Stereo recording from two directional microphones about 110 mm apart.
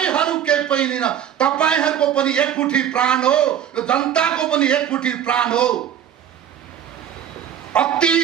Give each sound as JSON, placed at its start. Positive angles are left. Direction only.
{"t": 0.0, "sound": "a man's voice", "side_deg": 10}
{"t": 7.7, "sound": "a man's voice", "side_deg": 10}